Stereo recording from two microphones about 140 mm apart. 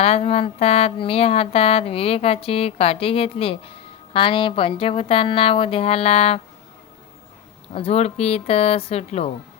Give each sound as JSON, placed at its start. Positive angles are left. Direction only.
{"t": 0.0, "sound": "speech", "side_deg": 45}
{"t": 7.7, "sound": "speech", "side_deg": 45}